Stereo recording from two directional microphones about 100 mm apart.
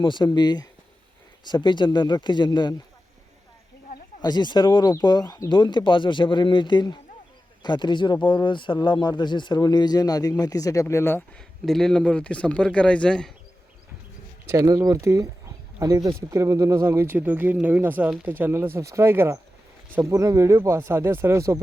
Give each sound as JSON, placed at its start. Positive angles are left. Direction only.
{"t": 0.0, "sound": "speech", "side_deg": 50}
{"t": 4.2, "sound": "speech", "side_deg": 45}
{"t": 11.3, "sound": "a man's voice", "side_deg": 5}
{"t": 14.4, "sound": "speech", "side_deg": -30}